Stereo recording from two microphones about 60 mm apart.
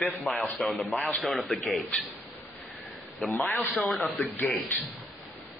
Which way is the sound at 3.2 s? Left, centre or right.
Centre.